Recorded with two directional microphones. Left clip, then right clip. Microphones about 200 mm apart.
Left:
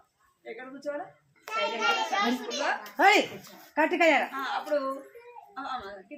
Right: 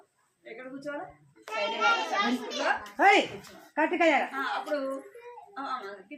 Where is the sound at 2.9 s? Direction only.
30° left (ahead or behind).